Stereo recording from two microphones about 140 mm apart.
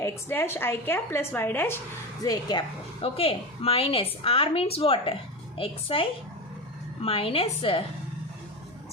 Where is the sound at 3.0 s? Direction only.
45° left (ahead or behind).